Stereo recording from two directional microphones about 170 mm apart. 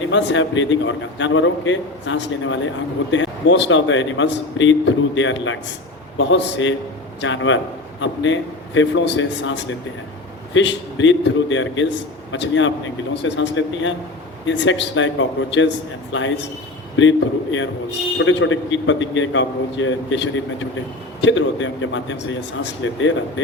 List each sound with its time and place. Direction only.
0.1 s a man's voice: 90° left